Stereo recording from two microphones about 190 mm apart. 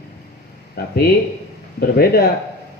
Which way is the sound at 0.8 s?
55° left (ahead or behind).